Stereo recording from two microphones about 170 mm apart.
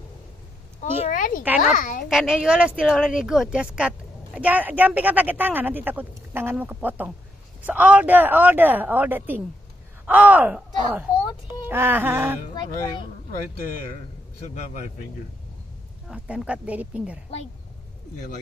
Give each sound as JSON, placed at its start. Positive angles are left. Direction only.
{"t": 0.7, "sound": "a woman's voice", "side_deg": 50}
{"t": 2.0, "sound": "a woman's voice", "side_deg": -5}
{"t": 12.5, "sound": "speech", "side_deg": 25}
{"t": 14.5, "sound": "speech", "side_deg": 45}
{"t": 16.1, "sound": "a woman's voice", "side_deg": -5}